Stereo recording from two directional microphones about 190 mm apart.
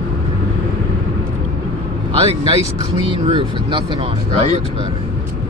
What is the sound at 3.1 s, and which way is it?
Speech, 30° right (ahead or behind).